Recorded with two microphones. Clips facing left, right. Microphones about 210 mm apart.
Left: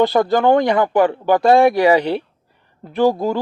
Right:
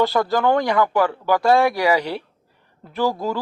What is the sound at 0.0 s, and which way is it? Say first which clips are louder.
Speech: left 4 dB; 20° left (ahead or behind).